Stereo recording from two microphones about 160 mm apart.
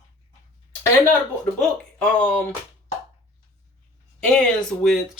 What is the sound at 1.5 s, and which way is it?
Speech, 5° left (ahead or behind).